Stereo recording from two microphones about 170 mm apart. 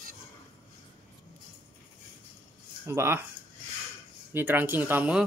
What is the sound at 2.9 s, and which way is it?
Speech, 15° right (ahead or behind).